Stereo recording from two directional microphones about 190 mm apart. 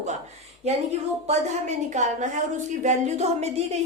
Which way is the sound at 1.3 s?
35° right (ahead or behind).